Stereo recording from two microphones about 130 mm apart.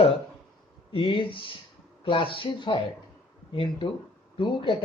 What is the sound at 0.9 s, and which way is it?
A man's voice, 40° left (ahead or behind).